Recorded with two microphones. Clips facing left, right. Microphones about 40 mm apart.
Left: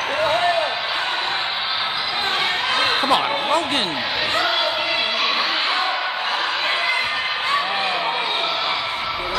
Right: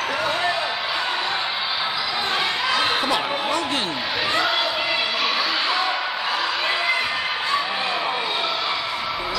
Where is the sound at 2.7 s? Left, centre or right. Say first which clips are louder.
Left 4 dB; left.